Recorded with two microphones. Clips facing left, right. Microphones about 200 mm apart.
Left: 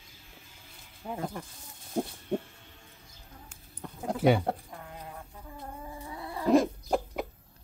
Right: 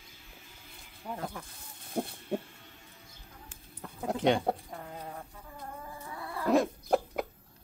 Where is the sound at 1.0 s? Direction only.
10° left (ahead or behind).